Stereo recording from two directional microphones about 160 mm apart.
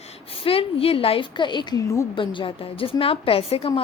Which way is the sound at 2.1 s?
30° left (ahead or behind).